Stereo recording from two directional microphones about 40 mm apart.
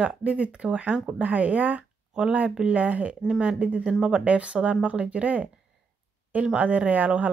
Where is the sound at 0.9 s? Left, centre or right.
Right.